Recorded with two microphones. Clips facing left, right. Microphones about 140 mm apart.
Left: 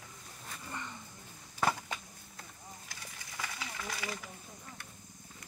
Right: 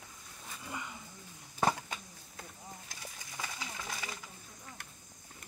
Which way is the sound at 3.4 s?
20° right (ahead or behind).